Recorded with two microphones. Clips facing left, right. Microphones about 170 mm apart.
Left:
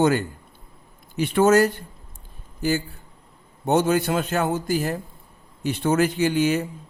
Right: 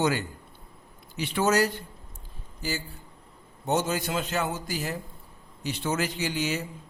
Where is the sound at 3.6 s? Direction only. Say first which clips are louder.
Left 7 dB; 60° left (ahead or behind).